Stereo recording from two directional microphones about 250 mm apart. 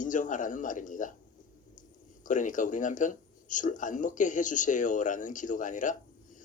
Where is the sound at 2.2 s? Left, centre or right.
Left.